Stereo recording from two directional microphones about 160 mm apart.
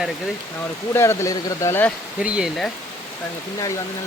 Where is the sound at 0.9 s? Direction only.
20° left (ahead or behind).